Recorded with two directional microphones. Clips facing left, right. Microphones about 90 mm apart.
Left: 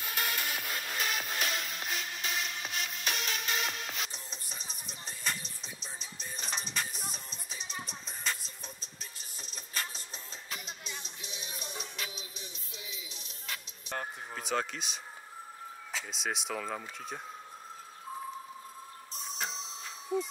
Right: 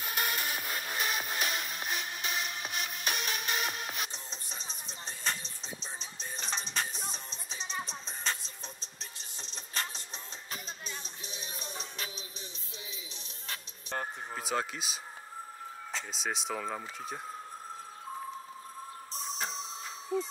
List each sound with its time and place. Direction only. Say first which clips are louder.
0.1 s music: right 1 dB; 20° right (ahead or behind)
4.1 s music: right 1 dB; 30° right (ahead or behind)
13.9 s a sound: right 2 dB; centre (ahead or behind)
15.9 s speech: even; centre (ahead or behind)